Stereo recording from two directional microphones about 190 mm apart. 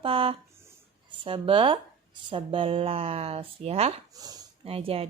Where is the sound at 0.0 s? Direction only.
30° right (ahead or behind).